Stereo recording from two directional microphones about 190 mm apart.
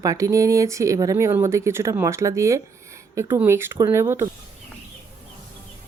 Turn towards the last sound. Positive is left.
turn(degrees=-15)  # may be behind; listen again after turning